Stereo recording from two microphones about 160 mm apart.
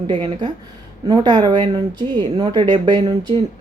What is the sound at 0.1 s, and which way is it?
Speech, 25° right (ahead or behind).